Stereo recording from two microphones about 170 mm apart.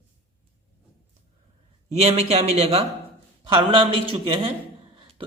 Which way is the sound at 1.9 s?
40° right (ahead or behind).